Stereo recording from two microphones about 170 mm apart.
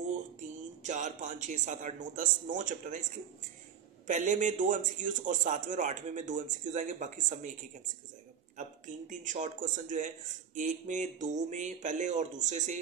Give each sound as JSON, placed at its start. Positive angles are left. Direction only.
{"t": 0.8, "sound": "a man's voice", "side_deg": -45}
{"t": 4.1, "sound": "a man's voice", "side_deg": -50}
{"t": 8.5, "sound": "a man's voice", "side_deg": -45}